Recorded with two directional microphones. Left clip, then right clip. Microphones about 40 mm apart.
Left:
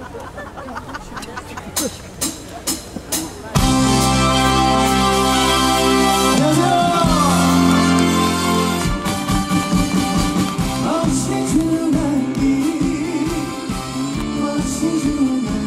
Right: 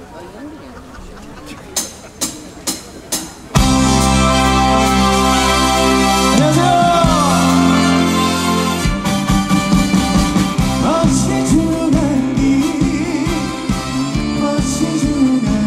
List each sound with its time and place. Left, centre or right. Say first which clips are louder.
1.8 s music: right 1 dB; centre; by 15.5 s right